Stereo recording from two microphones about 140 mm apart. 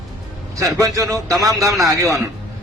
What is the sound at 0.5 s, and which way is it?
A man's voice, 20° right (ahead or behind).